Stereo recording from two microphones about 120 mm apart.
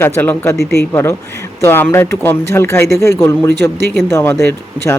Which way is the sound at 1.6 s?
20° left (ahead or behind).